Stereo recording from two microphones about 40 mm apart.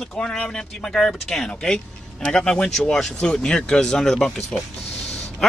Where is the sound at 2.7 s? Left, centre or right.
Centre.